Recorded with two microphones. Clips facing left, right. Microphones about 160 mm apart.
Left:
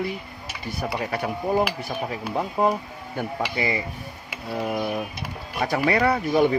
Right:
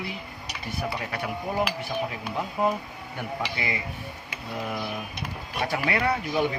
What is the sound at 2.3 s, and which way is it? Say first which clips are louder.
Speech: left 4 dB; 40° left (ahead or behind).